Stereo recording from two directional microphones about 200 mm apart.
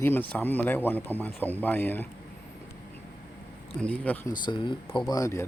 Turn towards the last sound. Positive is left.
turn(degrees=15)  # may be behind; listen again after turning